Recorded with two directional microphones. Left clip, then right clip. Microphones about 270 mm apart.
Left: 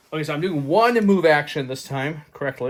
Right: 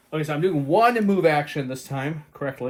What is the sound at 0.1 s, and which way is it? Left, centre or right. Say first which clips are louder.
Speech: right 1 dB; left.